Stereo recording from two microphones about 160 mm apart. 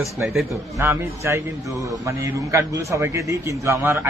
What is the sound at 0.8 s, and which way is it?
A man's voice, 15° right (ahead or behind).